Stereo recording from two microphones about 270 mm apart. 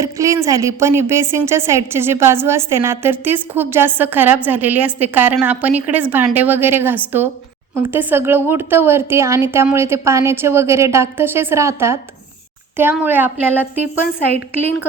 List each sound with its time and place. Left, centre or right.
0.0 s a woman's voice: centre